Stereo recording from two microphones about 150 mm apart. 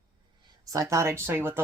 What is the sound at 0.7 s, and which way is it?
Speech, 20° right (ahead or behind).